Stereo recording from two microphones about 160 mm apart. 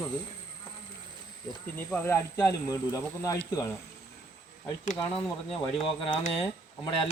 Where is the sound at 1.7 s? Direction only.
15° left (ahead or behind).